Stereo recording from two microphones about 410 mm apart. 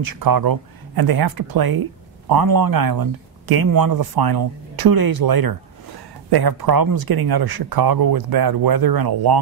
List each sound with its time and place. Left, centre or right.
0.0 s speech: right